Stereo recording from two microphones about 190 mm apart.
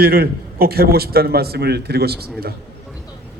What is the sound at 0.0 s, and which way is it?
A man's voice, 55° right (ahead or behind).